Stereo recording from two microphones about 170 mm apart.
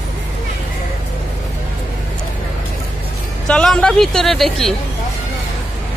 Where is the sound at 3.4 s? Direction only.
5° left (ahead or behind).